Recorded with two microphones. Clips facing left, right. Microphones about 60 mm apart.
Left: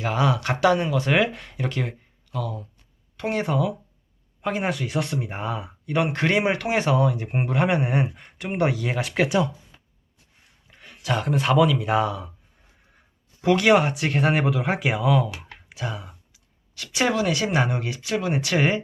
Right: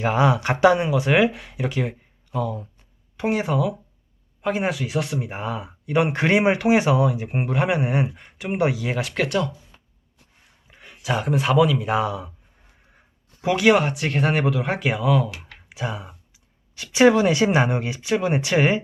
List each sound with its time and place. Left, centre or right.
0.0 s speech: right; by 2.0 s centre
2.3 s speech: right
3.2 s speech: centre
10.7 s speech: centre
13.4 s speech: centre
15.7 s speech: centre
18.5 s speech: centre